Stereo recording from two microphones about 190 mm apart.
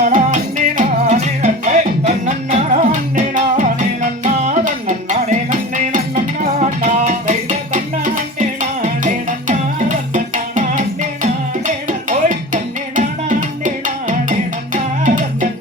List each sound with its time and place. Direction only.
0.0 s music: 40° right (ahead or behind)